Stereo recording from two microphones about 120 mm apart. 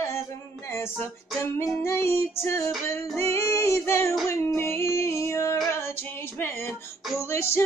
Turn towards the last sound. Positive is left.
turn(degrees=20)  # may be behind; listen again after turning